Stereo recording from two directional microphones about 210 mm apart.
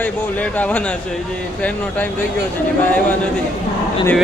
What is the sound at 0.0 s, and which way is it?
Speech, 5° left (ahead or behind).